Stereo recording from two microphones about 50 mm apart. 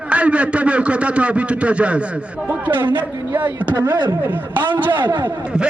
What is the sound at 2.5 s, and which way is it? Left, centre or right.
Speech, right.